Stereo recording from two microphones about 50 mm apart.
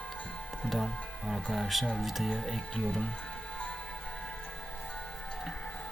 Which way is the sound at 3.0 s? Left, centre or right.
Centre.